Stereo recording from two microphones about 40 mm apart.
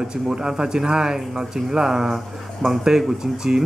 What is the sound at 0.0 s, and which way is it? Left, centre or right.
Speech, centre.